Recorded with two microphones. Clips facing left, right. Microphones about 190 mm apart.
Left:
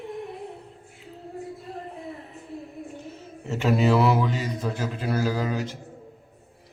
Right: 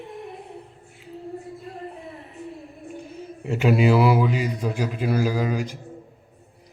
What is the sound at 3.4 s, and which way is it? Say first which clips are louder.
A man's voice: right 3 dB; 10° right (ahead or behind).